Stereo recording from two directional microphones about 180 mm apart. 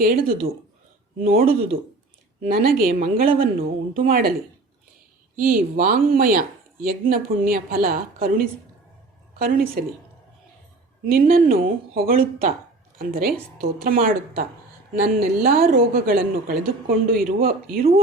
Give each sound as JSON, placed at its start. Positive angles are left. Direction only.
{"t": 0.0, "sound": "a woman's voice", "side_deg": -55}
{"t": 5.4, "sound": "a woman's voice", "side_deg": -50}
{"t": 11.0, "sound": "a woman's voice", "side_deg": -55}